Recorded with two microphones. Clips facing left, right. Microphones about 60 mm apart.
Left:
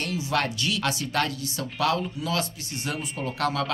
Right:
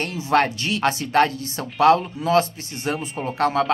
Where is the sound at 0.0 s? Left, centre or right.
Right.